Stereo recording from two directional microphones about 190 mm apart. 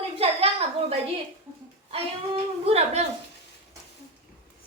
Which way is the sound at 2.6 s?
35° right (ahead or behind).